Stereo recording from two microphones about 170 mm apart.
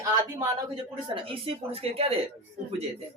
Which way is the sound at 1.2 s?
30° right (ahead or behind).